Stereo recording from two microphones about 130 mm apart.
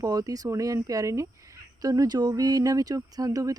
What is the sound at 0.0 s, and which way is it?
Speech, 25° right (ahead or behind).